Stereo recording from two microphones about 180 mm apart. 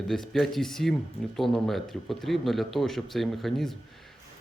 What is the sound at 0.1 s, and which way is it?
Speech, centre (ahead or behind).